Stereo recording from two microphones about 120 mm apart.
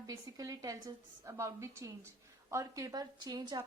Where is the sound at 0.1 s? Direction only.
30° right (ahead or behind).